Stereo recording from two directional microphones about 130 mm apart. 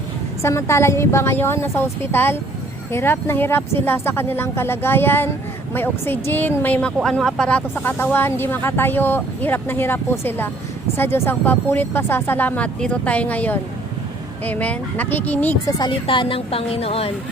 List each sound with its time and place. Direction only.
0.4 s a woman's voice: 20° left (ahead or behind)
15.8 s a woman's voice: 40° left (ahead or behind)